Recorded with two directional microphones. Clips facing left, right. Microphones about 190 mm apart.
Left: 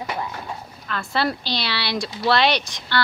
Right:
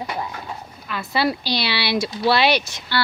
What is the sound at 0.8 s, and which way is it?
Speech, 5° right (ahead or behind).